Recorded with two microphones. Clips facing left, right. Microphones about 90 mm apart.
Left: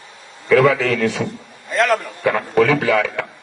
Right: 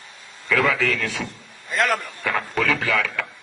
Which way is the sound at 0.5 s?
35° left (ahead or behind).